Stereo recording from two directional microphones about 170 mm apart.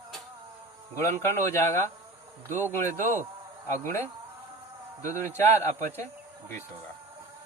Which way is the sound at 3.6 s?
15° left (ahead or behind).